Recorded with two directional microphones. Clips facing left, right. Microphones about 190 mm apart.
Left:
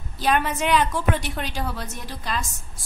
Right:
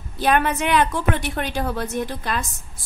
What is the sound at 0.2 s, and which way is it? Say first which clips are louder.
A woman's voice: right 3 dB; 55° right (ahead or behind).